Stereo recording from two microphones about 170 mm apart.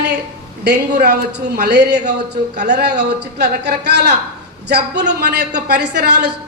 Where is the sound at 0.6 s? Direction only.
70° right (ahead or behind).